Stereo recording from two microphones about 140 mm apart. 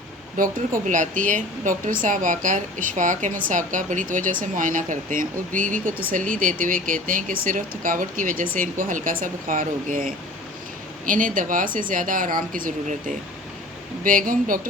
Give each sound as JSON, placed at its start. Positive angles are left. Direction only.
{"t": 0.3, "sound": "a woman's voice", "side_deg": -70}